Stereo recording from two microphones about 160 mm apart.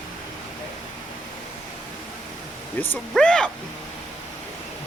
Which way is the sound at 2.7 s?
10° left (ahead or behind).